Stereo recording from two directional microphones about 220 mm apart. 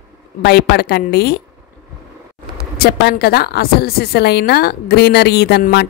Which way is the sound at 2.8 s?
45° left (ahead or behind).